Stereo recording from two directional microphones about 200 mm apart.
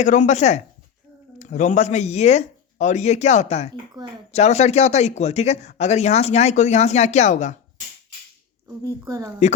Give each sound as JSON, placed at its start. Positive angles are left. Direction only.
{"t": 0.0, "sound": "a man's voice", "side_deg": 40}
{"t": 8.6, "sound": "speech", "side_deg": -15}